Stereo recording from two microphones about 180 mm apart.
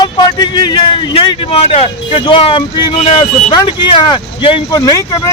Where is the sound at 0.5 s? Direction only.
25° left (ahead or behind).